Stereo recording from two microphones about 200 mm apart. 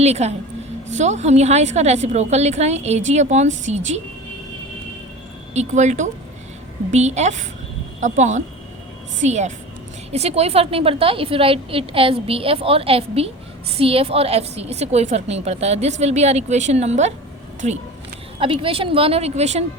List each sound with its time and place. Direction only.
0.0 s a woman's voice: 30° right (ahead or behind)
5.5 s a woman's voice: 35° right (ahead or behind)